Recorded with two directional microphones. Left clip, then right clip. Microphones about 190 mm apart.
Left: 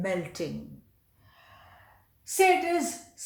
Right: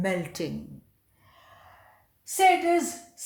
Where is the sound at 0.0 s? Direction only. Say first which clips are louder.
Right 2 dB; 40° right (ahead or behind).